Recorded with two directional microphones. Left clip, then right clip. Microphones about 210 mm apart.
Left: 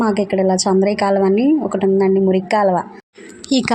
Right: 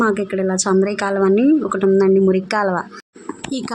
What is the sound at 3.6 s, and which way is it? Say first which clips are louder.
Speech: left 13 dB; 15° left (ahead or behind).